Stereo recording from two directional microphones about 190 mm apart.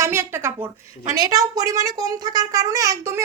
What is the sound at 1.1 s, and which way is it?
A woman's voice, 20° right (ahead or behind).